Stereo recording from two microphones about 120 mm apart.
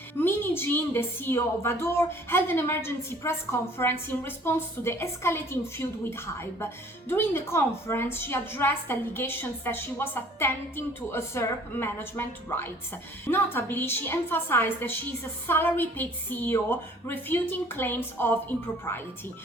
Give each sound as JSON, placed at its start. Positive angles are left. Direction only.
{"t": 0.2, "sound": "a woman's voice", "side_deg": 20}